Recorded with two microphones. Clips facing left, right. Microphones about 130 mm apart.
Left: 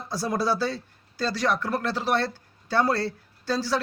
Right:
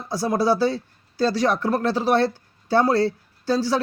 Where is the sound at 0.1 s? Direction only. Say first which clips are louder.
Right 5 dB; 15° right (ahead or behind).